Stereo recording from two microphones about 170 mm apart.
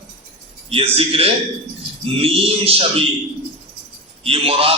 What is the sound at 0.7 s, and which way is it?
Speech, 35° right (ahead or behind).